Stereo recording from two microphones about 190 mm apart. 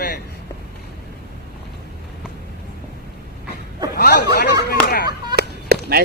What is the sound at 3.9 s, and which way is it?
Speech, 55° left (ahead or behind).